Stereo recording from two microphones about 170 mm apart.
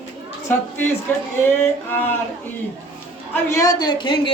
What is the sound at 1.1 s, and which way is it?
Speech, 10° left (ahead or behind).